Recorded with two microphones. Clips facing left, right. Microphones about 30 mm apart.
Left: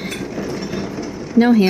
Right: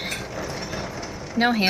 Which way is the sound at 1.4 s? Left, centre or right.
Right.